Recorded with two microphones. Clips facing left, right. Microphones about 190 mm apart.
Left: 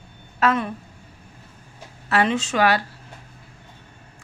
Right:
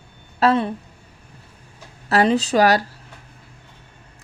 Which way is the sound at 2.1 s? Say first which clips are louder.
Right 4 dB; 35° right (ahead or behind).